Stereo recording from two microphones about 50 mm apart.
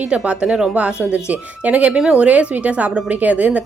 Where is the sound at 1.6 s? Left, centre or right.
Right.